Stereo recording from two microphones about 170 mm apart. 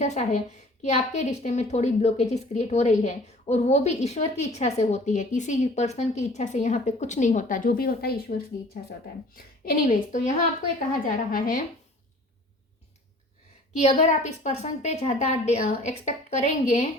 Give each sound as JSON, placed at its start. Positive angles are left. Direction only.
{"t": 0.0, "sound": "a woman's voice", "side_deg": 40}
{"t": 13.7, "sound": "a woman's voice", "side_deg": 45}